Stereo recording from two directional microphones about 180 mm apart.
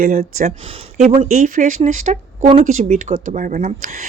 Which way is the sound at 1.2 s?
45° right (ahead or behind).